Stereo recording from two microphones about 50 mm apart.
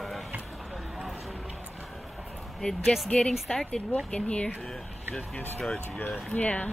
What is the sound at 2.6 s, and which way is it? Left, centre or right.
Speech, centre.